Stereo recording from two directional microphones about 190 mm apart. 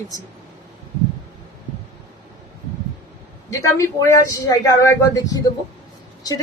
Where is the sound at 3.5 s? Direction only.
15° left (ahead or behind).